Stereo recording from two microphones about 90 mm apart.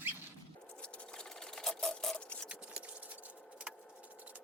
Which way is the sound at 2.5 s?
15° right (ahead or behind).